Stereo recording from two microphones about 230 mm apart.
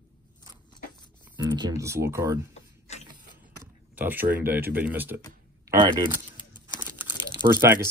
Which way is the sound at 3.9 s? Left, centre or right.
Centre.